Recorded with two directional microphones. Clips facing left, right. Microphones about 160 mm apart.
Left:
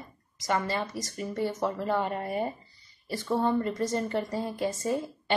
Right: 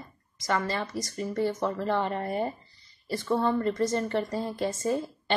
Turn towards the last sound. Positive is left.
turn(degrees=10)  # may be behind; listen again after turning